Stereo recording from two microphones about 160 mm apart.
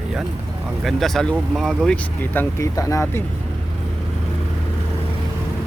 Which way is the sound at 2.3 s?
15° left (ahead or behind).